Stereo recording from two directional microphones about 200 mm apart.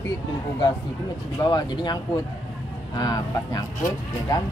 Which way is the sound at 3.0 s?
20° left (ahead or behind).